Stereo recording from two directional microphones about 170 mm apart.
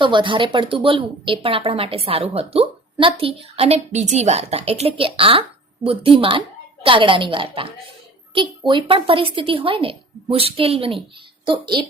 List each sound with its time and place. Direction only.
0.0 s a woman's voice: 30° right (ahead or behind)